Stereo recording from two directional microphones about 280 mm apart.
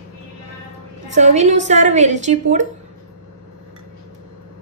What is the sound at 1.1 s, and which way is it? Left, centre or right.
A woman's voice, right.